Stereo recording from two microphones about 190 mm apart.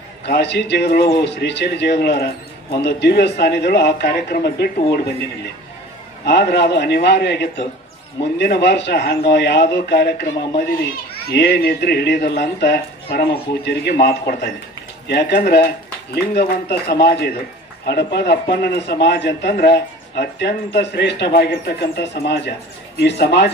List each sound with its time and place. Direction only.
0.2 s a man's voice: 65° left (ahead or behind)
6.2 s a man's voice: 60° left (ahead or behind)